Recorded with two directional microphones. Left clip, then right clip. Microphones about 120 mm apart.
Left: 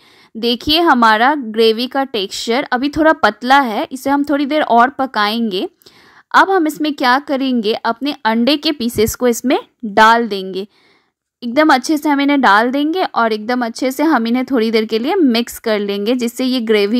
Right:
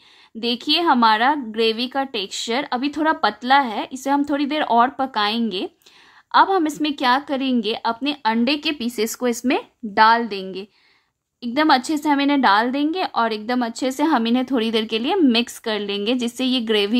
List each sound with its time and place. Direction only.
0.4 s a woman's voice: 50° left (ahead or behind)
11.4 s a woman's voice: 40° left (ahead or behind)